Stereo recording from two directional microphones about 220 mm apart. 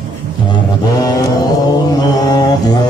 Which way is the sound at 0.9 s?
15° left (ahead or behind).